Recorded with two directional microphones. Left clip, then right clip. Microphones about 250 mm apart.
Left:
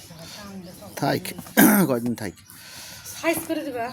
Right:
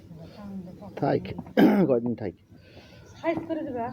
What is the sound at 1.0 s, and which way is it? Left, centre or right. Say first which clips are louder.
Speech: left 1 dB; left.